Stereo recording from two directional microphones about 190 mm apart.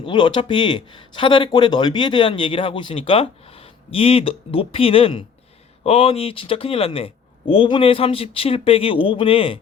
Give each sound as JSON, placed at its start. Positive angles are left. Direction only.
{"t": 0.0, "sound": "speech", "side_deg": 25}